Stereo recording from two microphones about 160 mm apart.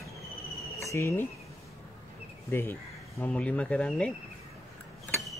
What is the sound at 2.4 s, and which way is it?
Speech, 15° left (ahead or behind).